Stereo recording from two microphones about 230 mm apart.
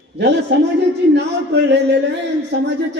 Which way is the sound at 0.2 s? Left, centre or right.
Right.